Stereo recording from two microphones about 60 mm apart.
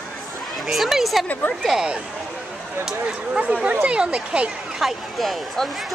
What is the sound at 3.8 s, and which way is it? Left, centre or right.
Speech, centre.